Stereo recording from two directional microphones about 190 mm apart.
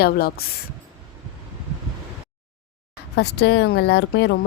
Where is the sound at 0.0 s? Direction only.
55° left (ahead or behind).